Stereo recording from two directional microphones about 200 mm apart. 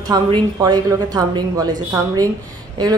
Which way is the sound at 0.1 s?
20° right (ahead or behind).